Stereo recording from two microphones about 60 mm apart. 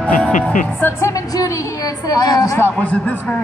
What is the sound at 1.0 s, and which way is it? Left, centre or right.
A woman's voice, left.